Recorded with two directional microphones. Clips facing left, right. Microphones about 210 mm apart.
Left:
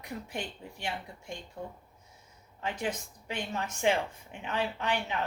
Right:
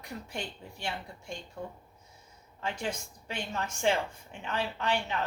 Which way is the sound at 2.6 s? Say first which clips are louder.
Left 1 dB; 15° left (ahead or behind).